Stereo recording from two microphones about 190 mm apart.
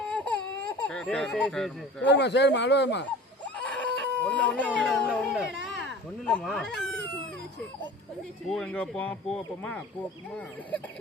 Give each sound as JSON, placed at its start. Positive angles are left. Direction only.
{"t": 0.0, "sound": "baby cry", "side_deg": 5}
{"t": 2.0, "sound": "speech", "side_deg": 65}
{"t": 3.4, "sound": "a sound", "side_deg": 5}
{"t": 4.3, "sound": "speech", "side_deg": 5}
{"t": 8.4, "sound": "speech", "side_deg": 5}